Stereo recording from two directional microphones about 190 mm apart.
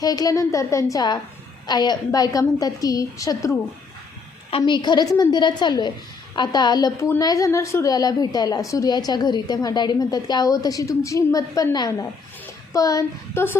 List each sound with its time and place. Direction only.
0.0 s a woman's voice: 20° left (ahead or behind)